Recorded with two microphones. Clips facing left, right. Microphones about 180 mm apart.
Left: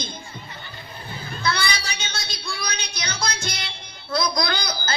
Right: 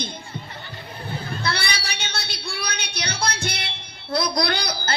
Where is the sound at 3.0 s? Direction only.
60° right (ahead or behind).